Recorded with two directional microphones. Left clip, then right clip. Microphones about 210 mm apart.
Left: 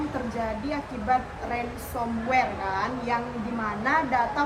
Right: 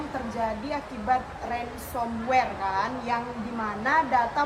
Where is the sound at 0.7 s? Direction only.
15° right (ahead or behind).